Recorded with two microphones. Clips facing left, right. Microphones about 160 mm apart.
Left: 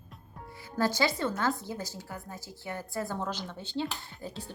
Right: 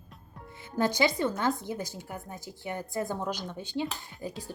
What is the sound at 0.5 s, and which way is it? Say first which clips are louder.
A woman's voice: right 1 dB; 20° right (ahead or behind).